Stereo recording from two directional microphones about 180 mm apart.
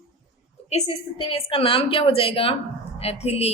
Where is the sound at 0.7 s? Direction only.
35° left (ahead or behind).